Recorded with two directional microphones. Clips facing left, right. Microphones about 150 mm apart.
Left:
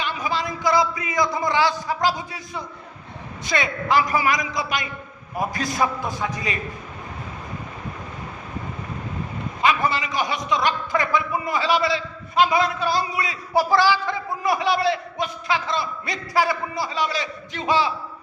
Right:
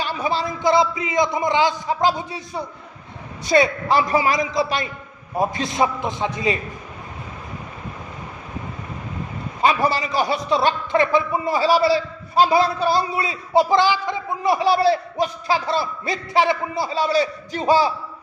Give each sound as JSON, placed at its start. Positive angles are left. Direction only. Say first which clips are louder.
{"t": 0.0, "sound": "a man's voice", "louder": "right 3 dB", "side_deg": -30}
{"t": 9.6, "sound": "a man's voice", "louder": "right 3 dB", "side_deg": -35}